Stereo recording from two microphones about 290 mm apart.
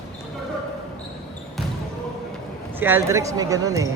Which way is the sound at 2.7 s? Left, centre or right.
Centre.